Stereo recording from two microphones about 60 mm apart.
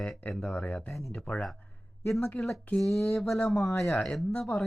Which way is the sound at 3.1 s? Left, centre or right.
Centre.